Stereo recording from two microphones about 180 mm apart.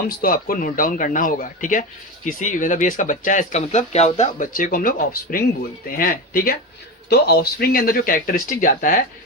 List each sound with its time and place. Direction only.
0.2 s speech: 50° left (ahead or behind)